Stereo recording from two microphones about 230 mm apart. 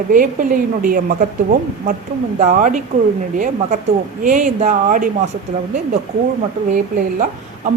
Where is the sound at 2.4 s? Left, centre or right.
Right.